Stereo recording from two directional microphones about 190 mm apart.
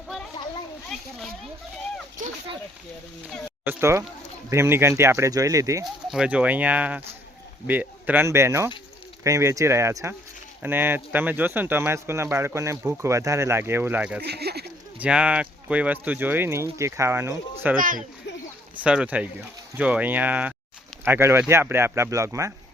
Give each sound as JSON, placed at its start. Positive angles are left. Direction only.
{"t": 0.9, "sound": "a sound", "side_deg": 0}
{"t": 3.7, "sound": "speech", "side_deg": -15}
{"t": 5.8, "sound": "speech", "side_deg": -5}
{"t": 14.3, "sound": "speech", "side_deg": -60}
{"t": 14.9, "sound": "speech", "side_deg": -5}
{"t": 17.7, "sound": "speech", "side_deg": -45}
{"t": 18.8, "sound": "speech", "side_deg": -5}